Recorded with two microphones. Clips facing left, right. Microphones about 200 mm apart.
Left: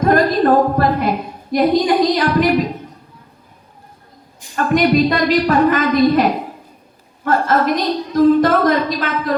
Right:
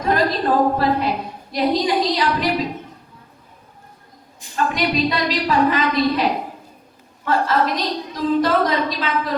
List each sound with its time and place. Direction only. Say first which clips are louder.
0.0 s a woman's voice: left 6 dB; 50° left (ahead or behind)
4.5 s a woman's voice: left 7 dB; 50° left (ahead or behind)